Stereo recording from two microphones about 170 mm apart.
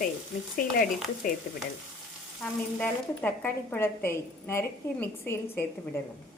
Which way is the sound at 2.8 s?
10° left (ahead or behind).